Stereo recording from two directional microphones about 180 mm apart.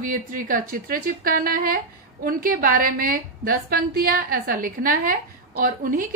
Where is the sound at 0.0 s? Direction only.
50° right (ahead or behind).